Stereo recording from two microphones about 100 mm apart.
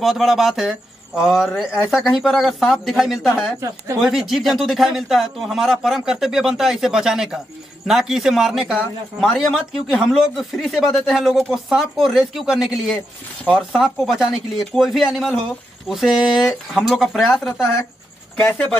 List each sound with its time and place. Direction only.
0.0 s speech: 5° right (ahead or behind)
18.4 s speech: 20° left (ahead or behind)